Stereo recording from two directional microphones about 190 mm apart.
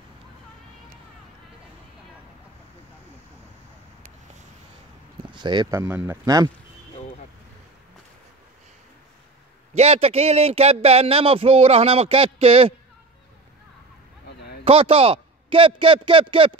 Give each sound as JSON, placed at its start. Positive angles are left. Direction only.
{"t": 5.3, "sound": "speech", "side_deg": -25}
{"t": 9.8, "sound": "speech", "side_deg": -35}
{"t": 14.6, "sound": "a man's voice", "side_deg": -30}